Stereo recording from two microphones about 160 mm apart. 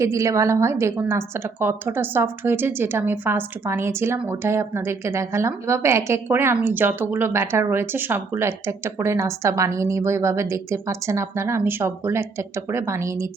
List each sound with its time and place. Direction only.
0.0 s a woman's voice: 20° right (ahead or behind)